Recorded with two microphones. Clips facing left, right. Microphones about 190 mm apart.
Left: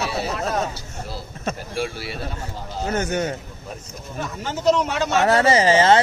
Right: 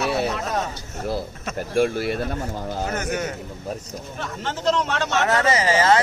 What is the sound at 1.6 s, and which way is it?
Speech, 50° right (ahead or behind).